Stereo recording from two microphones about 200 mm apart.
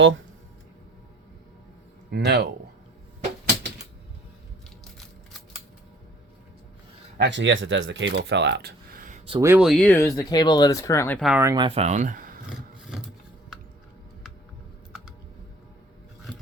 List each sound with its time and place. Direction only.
2.0 s speech: 55° right (ahead or behind)
7.2 s speech: 65° right (ahead or behind); by 9.4 s 30° right (ahead or behind)
9.4 s speech: 10° right (ahead or behind)
9.6 s speech: 5° left (ahead or behind)
11.2 s speech: 5° right (ahead or behind)
11.4 s speech: 20° right (ahead or behind); by 12.4 s 45° right (ahead or behind)
12.5 s a sound: 5° right (ahead or behind)